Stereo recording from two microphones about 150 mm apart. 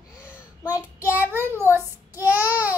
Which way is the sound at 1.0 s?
15° right (ahead or behind).